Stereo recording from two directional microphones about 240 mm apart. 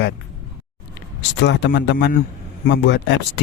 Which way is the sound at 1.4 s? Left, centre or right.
Left.